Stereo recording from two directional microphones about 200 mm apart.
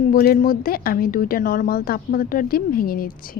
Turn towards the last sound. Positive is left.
turn(degrees=45)  # may be behind; listen again after turning